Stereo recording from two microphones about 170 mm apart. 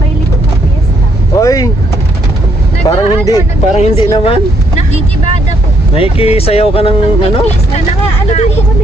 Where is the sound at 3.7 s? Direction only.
40° left (ahead or behind).